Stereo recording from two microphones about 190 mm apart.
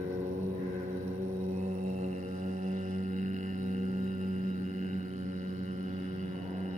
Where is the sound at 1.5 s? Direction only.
35° right (ahead or behind).